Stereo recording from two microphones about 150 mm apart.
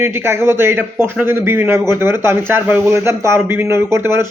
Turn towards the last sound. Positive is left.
turn(degrees=-20)  # may be behind; listen again after turning